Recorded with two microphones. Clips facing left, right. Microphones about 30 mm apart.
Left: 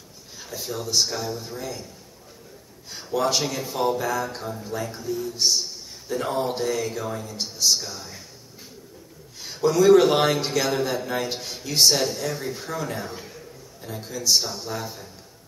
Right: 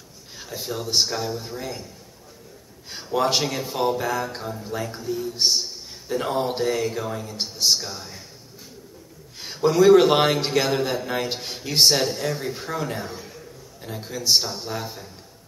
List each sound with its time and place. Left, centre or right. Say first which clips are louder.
0.4 s speech: right 1 dB; centre
2.9 s speech: right 2 dB; right
4.4 s speech: right 1 dB; centre
4.9 s speech: right 1 dB; right
6.0 s speech: right 1 dB; centre
9.4 s speech: right 2 dB; right
14.5 s speech: right 1 dB; right